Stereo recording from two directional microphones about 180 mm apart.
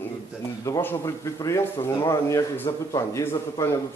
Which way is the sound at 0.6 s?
15° left (ahead or behind).